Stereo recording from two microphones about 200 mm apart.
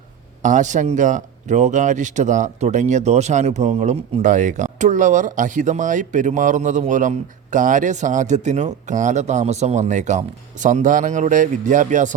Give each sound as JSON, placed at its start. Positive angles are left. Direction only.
{"t": 0.4, "sound": "speech", "side_deg": -40}